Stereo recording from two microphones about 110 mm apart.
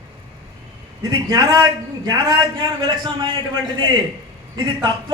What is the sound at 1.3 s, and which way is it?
A man's voice, 35° right (ahead or behind).